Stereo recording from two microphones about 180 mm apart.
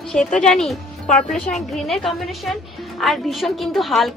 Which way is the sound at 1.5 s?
Centre (ahead or behind).